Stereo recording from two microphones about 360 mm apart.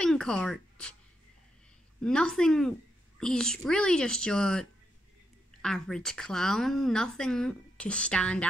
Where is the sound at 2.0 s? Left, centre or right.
Centre.